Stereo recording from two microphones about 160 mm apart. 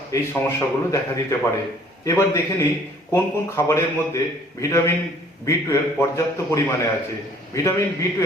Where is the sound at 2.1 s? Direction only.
20° left (ahead or behind).